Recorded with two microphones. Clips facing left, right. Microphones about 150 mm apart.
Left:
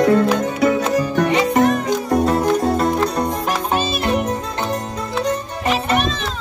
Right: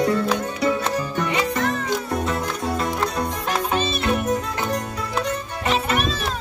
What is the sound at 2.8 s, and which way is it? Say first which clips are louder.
Music: left 6 dB; 50° left (ahead or behind).